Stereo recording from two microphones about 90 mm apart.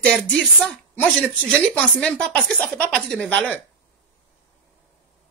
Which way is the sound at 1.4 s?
15° left (ahead or behind).